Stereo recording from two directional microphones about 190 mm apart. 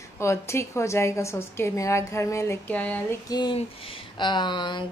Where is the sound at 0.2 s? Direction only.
15° left (ahead or behind).